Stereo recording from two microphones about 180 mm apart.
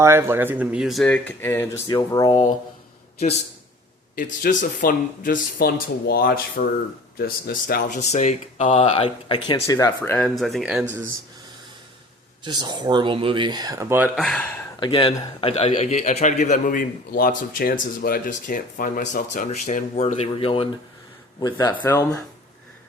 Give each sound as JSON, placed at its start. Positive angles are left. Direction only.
{"t": 0.0, "sound": "speech", "side_deg": -15}
{"t": 4.1, "sound": "a man's voice", "side_deg": 50}
{"t": 10.2, "sound": "speech", "side_deg": 0}
{"t": 12.5, "sound": "speech", "side_deg": -25}
{"t": 14.2, "sound": "speech", "side_deg": 5}
{"t": 14.8, "sound": "a man's voice", "side_deg": 30}